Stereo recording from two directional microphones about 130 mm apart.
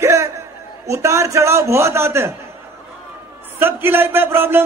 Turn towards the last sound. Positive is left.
turn(degrees=-15)  # may be behind; listen again after turning